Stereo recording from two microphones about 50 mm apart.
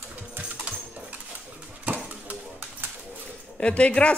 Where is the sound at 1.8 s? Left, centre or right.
Right.